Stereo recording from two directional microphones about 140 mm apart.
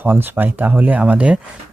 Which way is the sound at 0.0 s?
15° right (ahead or behind).